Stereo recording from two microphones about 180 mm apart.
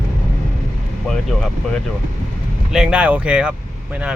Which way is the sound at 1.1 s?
5° left (ahead or behind).